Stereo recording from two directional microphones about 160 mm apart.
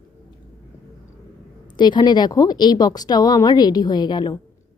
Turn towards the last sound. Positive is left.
turn(degrees=25)  # may be behind; listen again after turning